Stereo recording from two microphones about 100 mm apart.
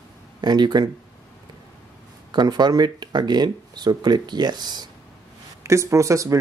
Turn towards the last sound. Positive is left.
turn(degrees=-30)  # may be behind; listen again after turning